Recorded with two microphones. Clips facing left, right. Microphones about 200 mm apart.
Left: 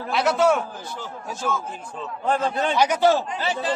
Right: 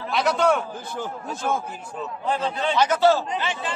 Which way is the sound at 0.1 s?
Centre (ahead or behind).